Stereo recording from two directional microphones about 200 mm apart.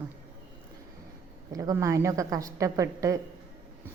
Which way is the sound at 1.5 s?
15° right (ahead or behind).